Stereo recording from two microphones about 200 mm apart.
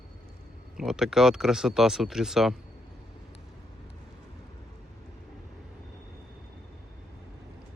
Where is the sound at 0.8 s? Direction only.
Centre (ahead or behind).